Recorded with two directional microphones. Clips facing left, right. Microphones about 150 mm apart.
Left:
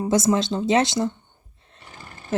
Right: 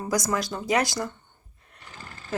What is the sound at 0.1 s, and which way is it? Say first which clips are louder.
A woman's voice: left 6 dB; 25° left (ahead or behind).